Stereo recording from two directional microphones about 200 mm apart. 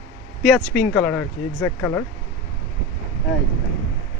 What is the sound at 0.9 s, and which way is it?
Speech, 5° left (ahead or behind).